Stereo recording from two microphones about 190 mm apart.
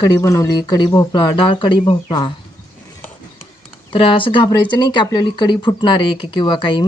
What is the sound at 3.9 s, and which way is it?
Speech, 25° left (ahead or behind).